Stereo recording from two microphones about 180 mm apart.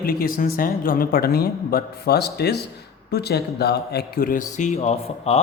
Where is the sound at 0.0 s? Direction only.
55° left (ahead or behind).